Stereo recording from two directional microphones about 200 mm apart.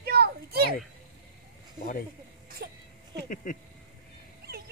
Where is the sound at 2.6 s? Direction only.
55° right (ahead or behind).